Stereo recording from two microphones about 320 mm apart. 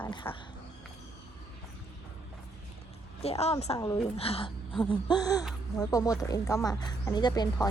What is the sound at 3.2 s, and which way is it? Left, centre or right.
A woman's voice, centre.